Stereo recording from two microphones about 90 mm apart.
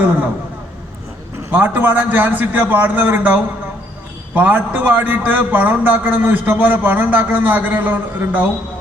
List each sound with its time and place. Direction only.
1.5 s a man's voice: 20° right (ahead or behind)